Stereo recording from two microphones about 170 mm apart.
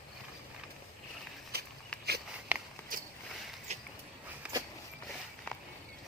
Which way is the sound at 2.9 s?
55° right (ahead or behind).